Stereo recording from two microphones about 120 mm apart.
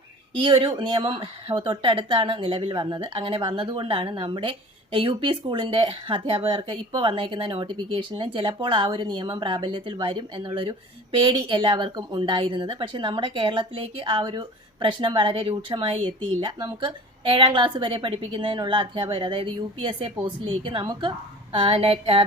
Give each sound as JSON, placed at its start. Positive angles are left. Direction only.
{"t": 0.3, "sound": "speech", "side_deg": -45}